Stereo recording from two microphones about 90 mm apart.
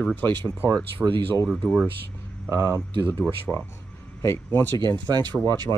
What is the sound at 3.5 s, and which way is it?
Speech, 10° right (ahead or behind).